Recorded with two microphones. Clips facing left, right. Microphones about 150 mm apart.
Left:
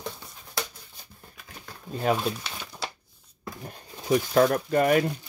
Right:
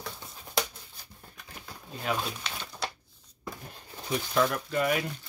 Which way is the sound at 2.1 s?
45° left (ahead or behind).